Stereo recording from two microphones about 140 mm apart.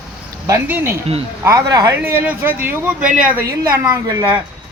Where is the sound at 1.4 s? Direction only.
25° right (ahead or behind); by 3.4 s 10° right (ahead or behind).